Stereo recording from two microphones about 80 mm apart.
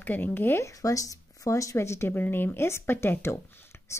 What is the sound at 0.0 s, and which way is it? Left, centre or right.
Speech, left.